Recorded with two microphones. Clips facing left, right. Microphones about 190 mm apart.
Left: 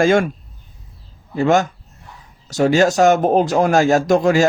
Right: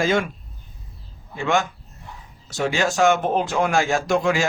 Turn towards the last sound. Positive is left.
turn(degrees=40)  # may be behind; listen again after turning